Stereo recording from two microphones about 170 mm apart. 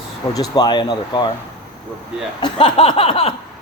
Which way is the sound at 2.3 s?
30° left (ahead or behind).